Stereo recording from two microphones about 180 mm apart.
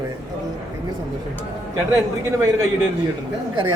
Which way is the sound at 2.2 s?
15° right (ahead or behind).